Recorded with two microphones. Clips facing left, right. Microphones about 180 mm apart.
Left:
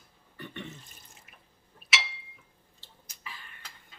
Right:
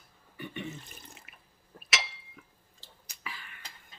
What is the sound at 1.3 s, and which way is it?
Drip, 70° right (ahead or behind).